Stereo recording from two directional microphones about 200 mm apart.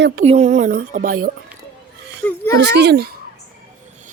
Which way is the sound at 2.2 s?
5° left (ahead or behind).